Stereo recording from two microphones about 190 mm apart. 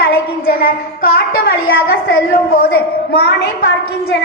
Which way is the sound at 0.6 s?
50° left (ahead or behind).